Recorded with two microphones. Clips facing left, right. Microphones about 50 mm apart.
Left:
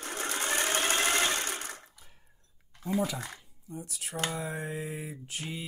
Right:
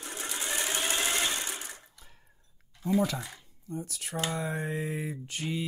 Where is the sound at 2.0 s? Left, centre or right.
Centre.